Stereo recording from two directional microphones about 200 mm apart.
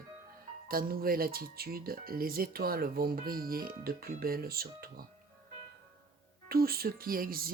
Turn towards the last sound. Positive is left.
turn(degrees=-45)  # may be behind; listen again after turning